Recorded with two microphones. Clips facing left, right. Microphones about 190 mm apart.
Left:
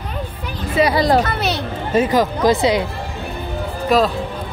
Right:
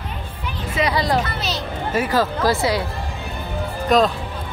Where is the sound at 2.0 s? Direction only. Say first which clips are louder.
Left 4 dB; 20° left (ahead or behind).